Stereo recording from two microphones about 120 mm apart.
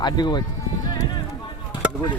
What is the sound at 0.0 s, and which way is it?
Speech, 35° left (ahead or behind).